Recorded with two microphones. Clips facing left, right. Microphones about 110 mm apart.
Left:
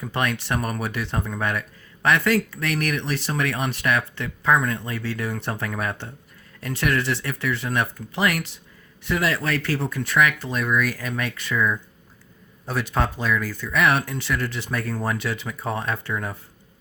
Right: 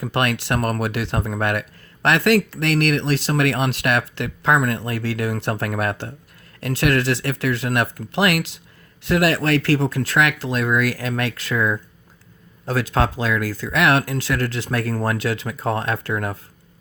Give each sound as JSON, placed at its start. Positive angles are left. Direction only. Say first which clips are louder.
{"t": 0.0, "sound": "speech", "louder": "right 4 dB", "side_deg": -90}
{"t": 1.3, "sound": "speech", "louder": "right 4 dB", "side_deg": -80}